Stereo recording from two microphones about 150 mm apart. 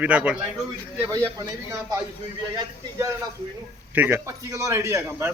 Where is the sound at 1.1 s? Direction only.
20° right (ahead or behind).